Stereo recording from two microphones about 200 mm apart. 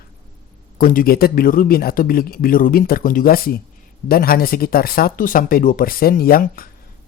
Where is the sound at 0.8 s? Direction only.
45° left (ahead or behind).